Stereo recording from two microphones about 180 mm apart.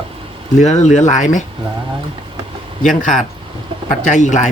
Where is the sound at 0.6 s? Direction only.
40° left (ahead or behind).